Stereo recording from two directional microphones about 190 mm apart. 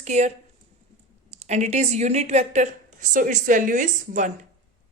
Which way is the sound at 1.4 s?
35° right (ahead or behind).